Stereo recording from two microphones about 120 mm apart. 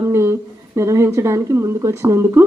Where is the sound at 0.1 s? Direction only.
20° right (ahead or behind).